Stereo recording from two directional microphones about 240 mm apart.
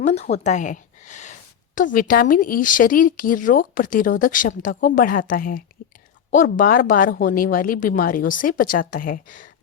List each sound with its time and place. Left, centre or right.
0.0 s a woman's voice: left